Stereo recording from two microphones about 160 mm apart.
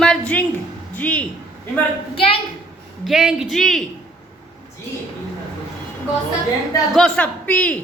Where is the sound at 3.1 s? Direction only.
5° right (ahead or behind).